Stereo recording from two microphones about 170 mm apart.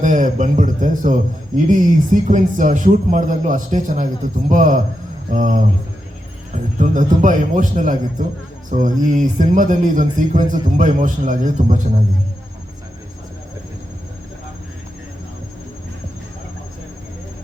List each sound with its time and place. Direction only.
0.0 s a man's voice: 50° right (ahead or behind)
6.7 s a man's voice: 50° right (ahead or behind)